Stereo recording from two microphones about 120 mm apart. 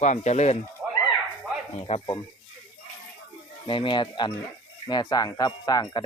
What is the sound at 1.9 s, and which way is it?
Speech, 65° left (ahead or behind).